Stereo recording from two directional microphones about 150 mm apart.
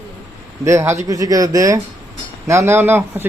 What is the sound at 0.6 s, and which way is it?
Speech, 20° right (ahead or behind).